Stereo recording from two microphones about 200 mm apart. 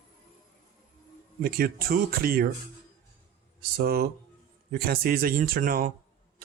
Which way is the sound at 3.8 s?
50° right (ahead or behind).